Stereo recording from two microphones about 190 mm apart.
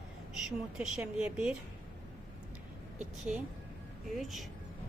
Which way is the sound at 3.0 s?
5° right (ahead or behind).